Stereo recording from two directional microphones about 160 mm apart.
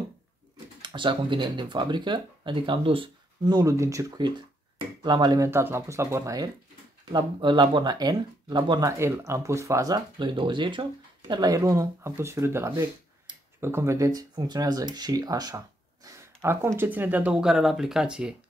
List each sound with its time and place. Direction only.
0.8 s speech: 30° right (ahead or behind); by 18.3 s 5° right (ahead or behind)